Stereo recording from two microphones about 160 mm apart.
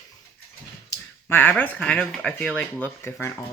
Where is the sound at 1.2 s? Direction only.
15° left (ahead or behind).